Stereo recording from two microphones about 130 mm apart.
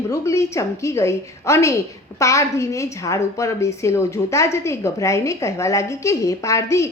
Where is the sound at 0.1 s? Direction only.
25° left (ahead or behind).